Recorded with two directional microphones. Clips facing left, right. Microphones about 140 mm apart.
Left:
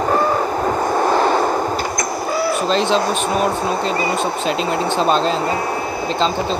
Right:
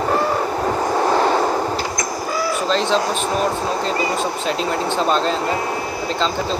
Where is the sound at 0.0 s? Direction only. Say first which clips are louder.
Left 2 dB; 45° left (ahead or behind).